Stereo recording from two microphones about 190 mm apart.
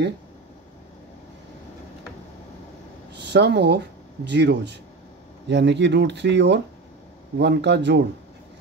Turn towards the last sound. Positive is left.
turn(degrees=-65)  # may be behind; listen again after turning